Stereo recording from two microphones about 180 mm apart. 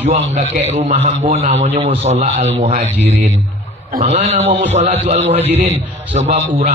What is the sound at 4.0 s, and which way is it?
A man's voice, 40° right (ahead or behind).